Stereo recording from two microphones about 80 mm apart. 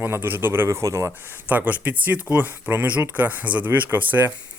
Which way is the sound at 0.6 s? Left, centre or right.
Right.